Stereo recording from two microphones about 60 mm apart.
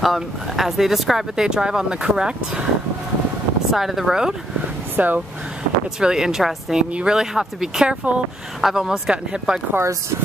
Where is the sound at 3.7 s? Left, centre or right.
Centre.